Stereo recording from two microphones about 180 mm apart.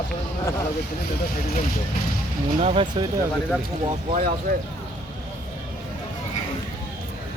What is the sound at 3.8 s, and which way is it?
Speech, 45° right (ahead or behind).